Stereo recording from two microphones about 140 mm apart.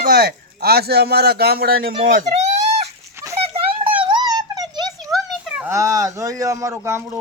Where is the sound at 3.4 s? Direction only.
40° right (ahead or behind).